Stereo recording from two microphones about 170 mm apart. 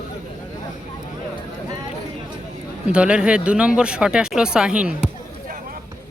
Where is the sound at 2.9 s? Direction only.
5° right (ahead or behind).